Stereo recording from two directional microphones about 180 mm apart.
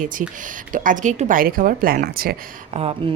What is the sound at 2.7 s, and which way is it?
Speech, 30° right (ahead or behind).